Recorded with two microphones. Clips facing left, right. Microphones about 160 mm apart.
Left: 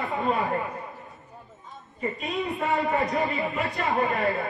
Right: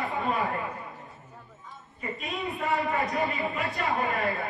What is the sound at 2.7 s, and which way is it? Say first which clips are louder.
Speech: left 2 dB; 20° left (ahead or behind).